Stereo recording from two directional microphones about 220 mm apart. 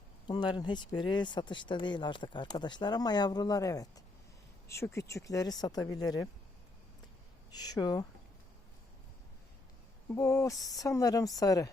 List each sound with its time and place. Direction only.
0.3 s a woman's voice: 20° left (ahead or behind)
7.5 s a woman's voice: 15° left (ahead or behind)
10.2 s a woman's voice: 10° left (ahead or behind)